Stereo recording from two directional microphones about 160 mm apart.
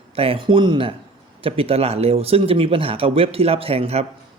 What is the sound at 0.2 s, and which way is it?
Speech, 35° right (ahead or behind).